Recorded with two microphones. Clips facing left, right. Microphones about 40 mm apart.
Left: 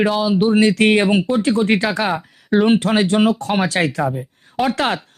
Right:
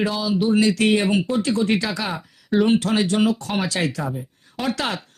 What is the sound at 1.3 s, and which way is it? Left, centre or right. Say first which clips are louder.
Speech: left 4 dB; left.